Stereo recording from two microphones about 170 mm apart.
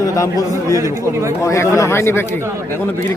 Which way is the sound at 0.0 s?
20° left (ahead or behind).